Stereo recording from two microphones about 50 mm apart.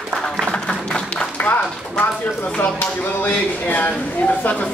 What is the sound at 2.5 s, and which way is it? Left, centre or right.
Speech, left.